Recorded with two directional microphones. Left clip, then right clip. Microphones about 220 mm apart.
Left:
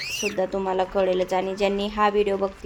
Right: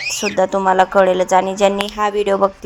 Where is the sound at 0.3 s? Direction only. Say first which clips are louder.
Right 12 dB; 10° right (ahead or behind).